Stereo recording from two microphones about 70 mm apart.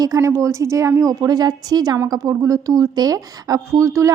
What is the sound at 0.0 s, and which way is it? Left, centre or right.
A woman's voice, right.